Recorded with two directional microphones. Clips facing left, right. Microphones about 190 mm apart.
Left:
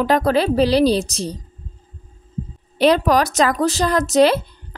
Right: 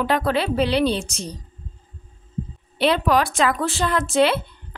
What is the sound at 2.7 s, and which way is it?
Speech, 40° left (ahead or behind).